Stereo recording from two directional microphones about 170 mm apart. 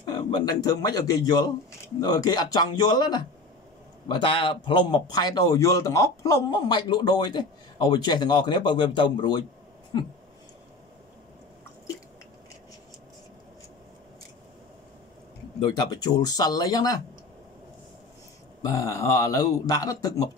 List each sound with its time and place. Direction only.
0.0 s a man's voice: 25° left (ahead or behind)
15.6 s a man's voice: 25° left (ahead or behind)
18.6 s a man's voice: 20° left (ahead or behind)